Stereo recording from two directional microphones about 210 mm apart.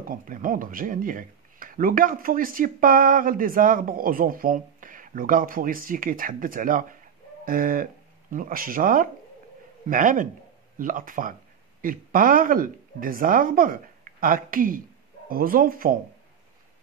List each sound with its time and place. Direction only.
0.1 s a woman's voice: 40° right (ahead or behind)